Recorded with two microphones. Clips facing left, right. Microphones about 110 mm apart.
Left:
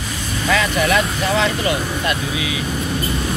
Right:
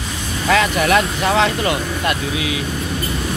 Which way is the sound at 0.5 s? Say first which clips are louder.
Right 2 dB; 55° right (ahead or behind).